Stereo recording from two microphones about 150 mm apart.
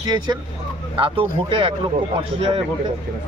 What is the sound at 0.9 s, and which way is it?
Speech, 35° right (ahead or behind).